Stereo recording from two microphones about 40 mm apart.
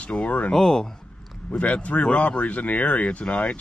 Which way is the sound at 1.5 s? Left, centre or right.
Left.